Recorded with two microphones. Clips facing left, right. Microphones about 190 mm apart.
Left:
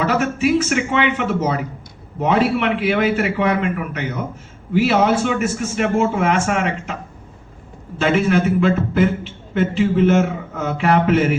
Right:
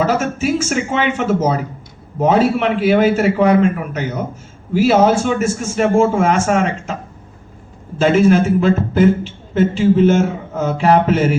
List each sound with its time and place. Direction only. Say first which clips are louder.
0.0 s a man's voice: right 1 dB; 40° right (ahead or behind)
8.0 s a man's voice: right 4 dB; 40° right (ahead or behind)